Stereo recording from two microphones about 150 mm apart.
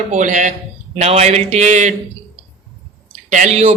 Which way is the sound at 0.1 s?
55° right (ahead or behind).